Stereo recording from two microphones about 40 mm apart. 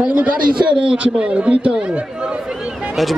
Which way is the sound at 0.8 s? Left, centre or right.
Right.